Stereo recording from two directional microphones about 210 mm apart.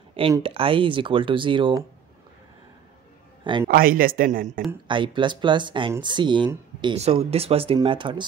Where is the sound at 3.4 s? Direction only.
25° right (ahead or behind).